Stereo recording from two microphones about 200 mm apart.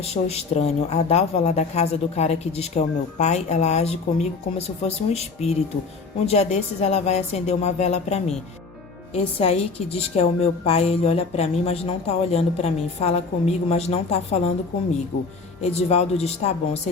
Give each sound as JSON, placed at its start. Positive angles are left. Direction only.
{"t": 0.0, "sound": "a woman's voice", "side_deg": 30}
{"t": 15.6, "sound": "a woman's voice", "side_deg": 30}